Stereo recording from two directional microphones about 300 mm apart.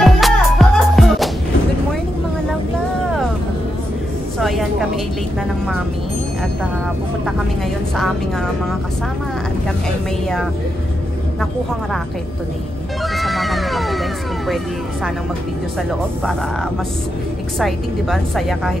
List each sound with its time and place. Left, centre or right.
0.0 s music: centre
4.4 s vehicle: centre
13.1 s run: centre
17.6 s a woman's voice: centre